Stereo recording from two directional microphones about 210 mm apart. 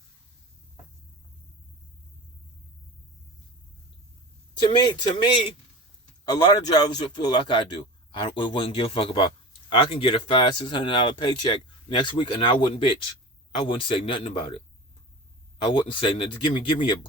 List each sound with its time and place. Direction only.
4.6 s speech: 20° left (ahead or behind)
15.6 s speech: 20° left (ahead or behind)